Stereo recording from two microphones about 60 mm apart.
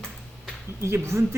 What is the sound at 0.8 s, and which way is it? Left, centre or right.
Speech, right.